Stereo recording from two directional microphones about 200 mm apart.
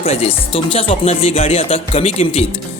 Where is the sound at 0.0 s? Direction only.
30° left (ahead or behind).